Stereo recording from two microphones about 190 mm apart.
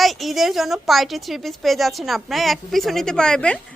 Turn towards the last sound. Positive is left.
turn(degrees=5)  # may be behind; listen again after turning